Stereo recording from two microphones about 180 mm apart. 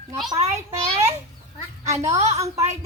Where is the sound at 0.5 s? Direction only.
15° right (ahead or behind).